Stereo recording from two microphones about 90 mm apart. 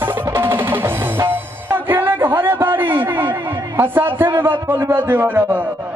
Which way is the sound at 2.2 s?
30° right (ahead or behind).